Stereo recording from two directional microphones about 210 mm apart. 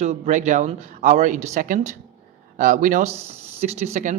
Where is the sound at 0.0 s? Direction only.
35° right (ahead or behind).